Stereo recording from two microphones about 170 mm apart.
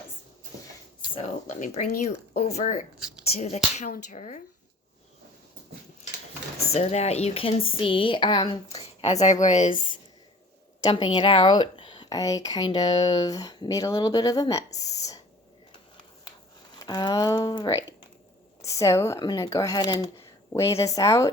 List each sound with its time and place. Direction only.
1.5 s speech: 45° left (ahead or behind)
6.7 s speech: 40° left (ahead or behind)
10.8 s speech: 25° left (ahead or behind)
16.7 s speech: 25° left (ahead or behind)